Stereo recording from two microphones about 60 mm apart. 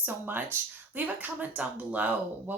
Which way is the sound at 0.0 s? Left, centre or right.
Right.